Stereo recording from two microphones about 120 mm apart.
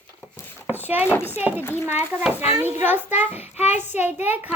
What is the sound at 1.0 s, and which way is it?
Speech, 15° left (ahead or behind).